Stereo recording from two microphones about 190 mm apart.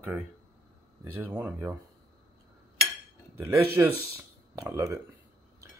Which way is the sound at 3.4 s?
10° right (ahead or behind).